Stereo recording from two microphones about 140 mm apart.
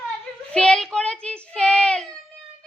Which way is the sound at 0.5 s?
5° left (ahead or behind).